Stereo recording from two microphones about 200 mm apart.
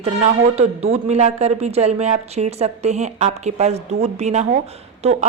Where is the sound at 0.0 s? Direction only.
30° right (ahead or behind).